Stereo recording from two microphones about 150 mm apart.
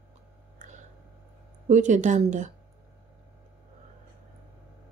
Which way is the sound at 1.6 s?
55° right (ahead or behind).